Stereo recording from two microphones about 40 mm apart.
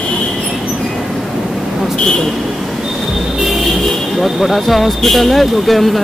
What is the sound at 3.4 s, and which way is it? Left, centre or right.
Speech, centre.